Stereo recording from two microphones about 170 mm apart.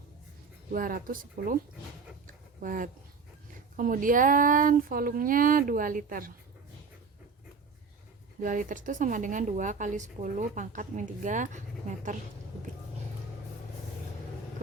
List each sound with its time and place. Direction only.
0.7 s speech: 55° right (ahead or behind)
2.2 s a sound: 50° right (ahead or behind)
3.8 s a woman's voice: 50° right (ahead or behind)
8.4 s a woman's voice: 50° right (ahead or behind)